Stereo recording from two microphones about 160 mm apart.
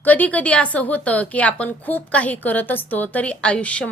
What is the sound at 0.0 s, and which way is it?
A woman's voice, 10° left (ahead or behind).